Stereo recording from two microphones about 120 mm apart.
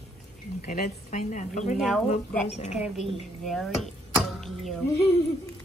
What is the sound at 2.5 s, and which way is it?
Speech, 75° left (ahead or behind).